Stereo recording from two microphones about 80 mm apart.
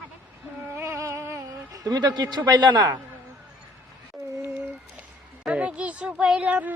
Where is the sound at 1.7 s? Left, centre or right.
Right.